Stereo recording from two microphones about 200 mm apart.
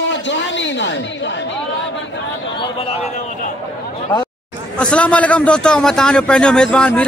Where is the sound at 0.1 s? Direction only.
65° left (ahead or behind).